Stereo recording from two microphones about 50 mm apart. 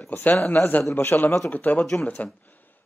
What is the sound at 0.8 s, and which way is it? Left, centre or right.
Speech, left.